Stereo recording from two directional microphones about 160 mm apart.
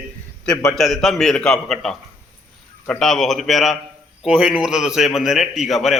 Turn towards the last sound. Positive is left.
turn(degrees=0)  # may be behind; listen again after turning